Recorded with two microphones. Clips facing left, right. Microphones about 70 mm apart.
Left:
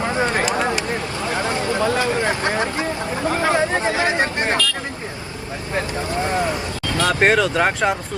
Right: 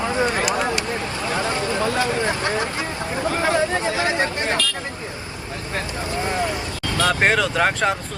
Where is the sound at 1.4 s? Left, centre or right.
Left.